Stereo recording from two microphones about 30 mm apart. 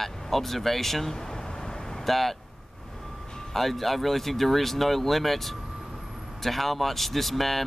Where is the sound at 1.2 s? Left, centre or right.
Left.